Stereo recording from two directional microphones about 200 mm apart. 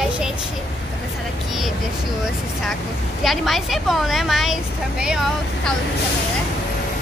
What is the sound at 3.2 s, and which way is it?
Speech, centre (ahead or behind).